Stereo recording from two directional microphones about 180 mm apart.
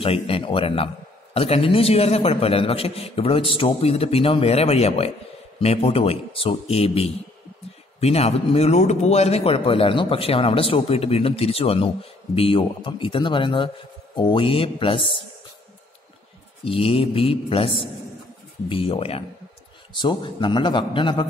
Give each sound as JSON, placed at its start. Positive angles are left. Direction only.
{"t": 0.0, "sound": "a man's voice", "side_deg": 30}
{"t": 16.6, "sound": "a man's voice", "side_deg": 30}